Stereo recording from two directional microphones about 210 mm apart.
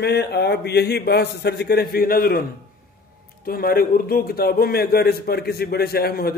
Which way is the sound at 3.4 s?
45° left (ahead or behind).